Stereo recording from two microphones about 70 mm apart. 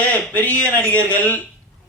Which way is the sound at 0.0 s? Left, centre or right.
Left.